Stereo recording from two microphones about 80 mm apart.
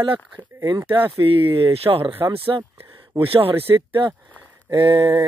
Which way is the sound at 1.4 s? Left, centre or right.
Right.